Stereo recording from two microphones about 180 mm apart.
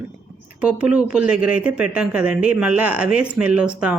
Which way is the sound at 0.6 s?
5° right (ahead or behind).